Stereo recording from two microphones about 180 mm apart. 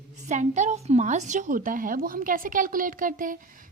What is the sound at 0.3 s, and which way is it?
A woman's voice, 40° right (ahead or behind).